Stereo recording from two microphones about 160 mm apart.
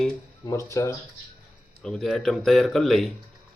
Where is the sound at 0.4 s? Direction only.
20° left (ahead or behind).